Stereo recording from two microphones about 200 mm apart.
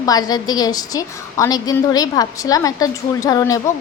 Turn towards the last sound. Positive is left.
turn(degrees=15)  # may be behind; listen again after turning